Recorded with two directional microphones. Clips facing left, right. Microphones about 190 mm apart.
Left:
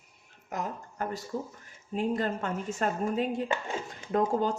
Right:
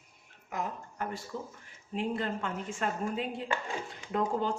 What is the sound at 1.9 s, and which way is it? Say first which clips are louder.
A woman's voice: left 3 dB; 40° left (ahead or behind).